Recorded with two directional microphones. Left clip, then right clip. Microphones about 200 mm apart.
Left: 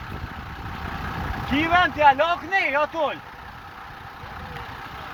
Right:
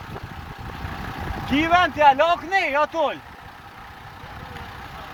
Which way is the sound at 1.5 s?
45° right (ahead or behind).